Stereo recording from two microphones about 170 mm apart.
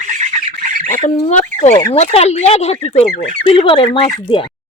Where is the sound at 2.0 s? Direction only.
40° left (ahead or behind).